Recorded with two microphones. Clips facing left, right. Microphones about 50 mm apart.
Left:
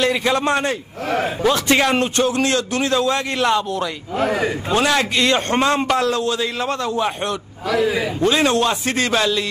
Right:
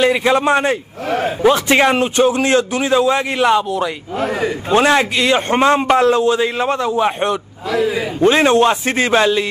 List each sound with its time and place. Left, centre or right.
0.0 s a man's voice: centre
5.1 s a man's voice: centre
5.5 s a man's voice: right